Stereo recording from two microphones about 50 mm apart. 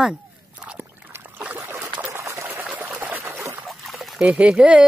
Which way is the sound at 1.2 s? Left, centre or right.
Right.